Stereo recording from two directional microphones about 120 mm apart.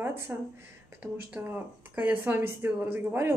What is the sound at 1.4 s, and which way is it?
Speech, 15° right (ahead or behind).